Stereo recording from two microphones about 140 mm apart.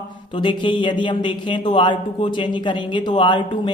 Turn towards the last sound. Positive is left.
turn(degrees=35)  # may be behind; listen again after turning